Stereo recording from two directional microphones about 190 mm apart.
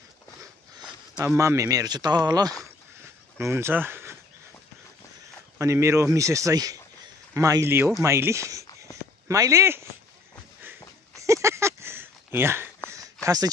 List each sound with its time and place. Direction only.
0.8 s speech: 10° right (ahead or behind)
5.6 s a man's voice: 15° right (ahead or behind)
10.6 s a sound: 15° right (ahead or behind)